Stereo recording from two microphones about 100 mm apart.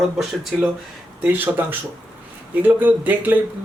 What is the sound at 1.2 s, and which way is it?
Speech, 15° right (ahead or behind).